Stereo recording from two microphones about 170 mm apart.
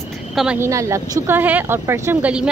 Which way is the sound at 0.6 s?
15° right (ahead or behind).